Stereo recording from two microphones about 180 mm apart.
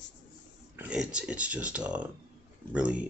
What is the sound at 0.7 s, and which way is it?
Speech, 5° right (ahead or behind).